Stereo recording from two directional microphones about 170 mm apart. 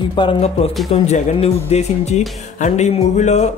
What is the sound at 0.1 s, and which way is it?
Speech, 30° left (ahead or behind).